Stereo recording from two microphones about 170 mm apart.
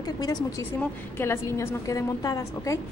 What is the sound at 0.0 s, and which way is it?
A woman's voice, 20° left (ahead or behind).